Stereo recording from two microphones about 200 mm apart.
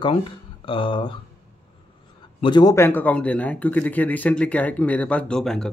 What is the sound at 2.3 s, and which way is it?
Speech, 25° left (ahead or behind).